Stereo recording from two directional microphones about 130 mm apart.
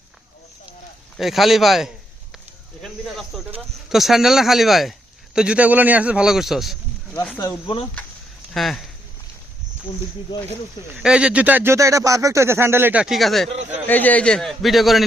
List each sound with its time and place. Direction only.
1.1 s speech: centre (ahead or behind)
7.3 s speech: 20° left (ahead or behind)
8.5 s speech: centre (ahead or behind)
11.0 s speech: 5° right (ahead or behind)
13.5 s speech: 60° right (ahead or behind)
13.8 s speech: 15° left (ahead or behind)